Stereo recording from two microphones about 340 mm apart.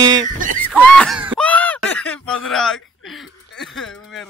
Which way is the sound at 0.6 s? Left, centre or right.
Centre.